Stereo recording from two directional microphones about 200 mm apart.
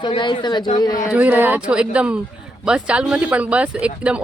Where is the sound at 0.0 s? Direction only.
25° left (ahead or behind).